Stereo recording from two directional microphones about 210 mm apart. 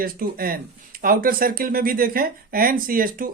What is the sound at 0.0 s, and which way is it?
Speech, 45° right (ahead or behind).